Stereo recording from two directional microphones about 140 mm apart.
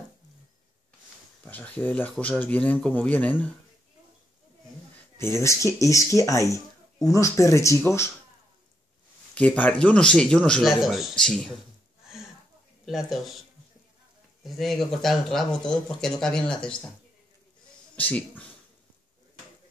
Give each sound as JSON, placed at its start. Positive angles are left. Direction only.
{"t": 1.4, "sound": "a man's voice", "side_deg": 10}
{"t": 5.1, "sound": "speech", "side_deg": 20}
{"t": 9.3, "sound": "a man's voice", "side_deg": 10}
{"t": 12.8, "sound": "speech", "side_deg": 0}
{"t": 14.4, "sound": "speech", "side_deg": 0}
{"t": 17.9, "sound": "a man's voice", "side_deg": 10}